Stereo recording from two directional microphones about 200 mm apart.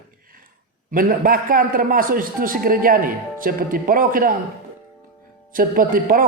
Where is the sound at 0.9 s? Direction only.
45° right (ahead or behind).